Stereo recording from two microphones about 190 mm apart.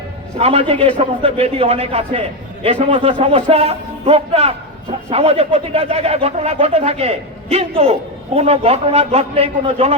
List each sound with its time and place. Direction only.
0.3 s a man's voice: 30° right (ahead or behind)